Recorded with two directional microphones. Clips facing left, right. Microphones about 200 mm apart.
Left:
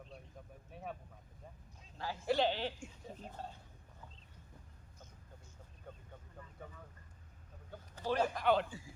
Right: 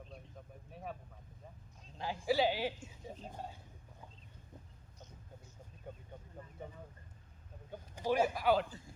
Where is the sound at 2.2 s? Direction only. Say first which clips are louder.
Right 1 dB; 5° right (ahead or behind).